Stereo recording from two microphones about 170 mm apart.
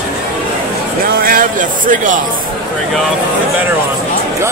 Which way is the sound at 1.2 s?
55° right (ahead or behind).